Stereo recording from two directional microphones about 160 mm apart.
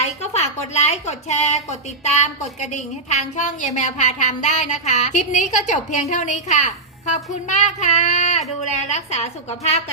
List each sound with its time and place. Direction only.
0.0 s a woman's voice: 45° left (ahead or behind)